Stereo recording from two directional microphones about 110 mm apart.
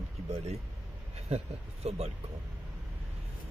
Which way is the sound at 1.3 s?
75° right (ahead or behind).